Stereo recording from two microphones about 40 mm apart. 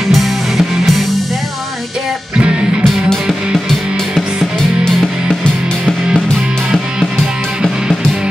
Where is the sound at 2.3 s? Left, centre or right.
Right.